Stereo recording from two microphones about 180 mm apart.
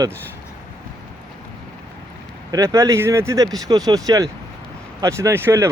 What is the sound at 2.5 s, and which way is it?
Speech, 15° right (ahead or behind).